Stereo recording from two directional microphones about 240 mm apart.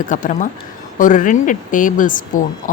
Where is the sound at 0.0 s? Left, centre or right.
Left.